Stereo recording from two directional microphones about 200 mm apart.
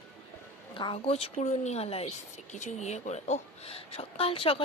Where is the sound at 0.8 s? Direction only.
25° left (ahead or behind).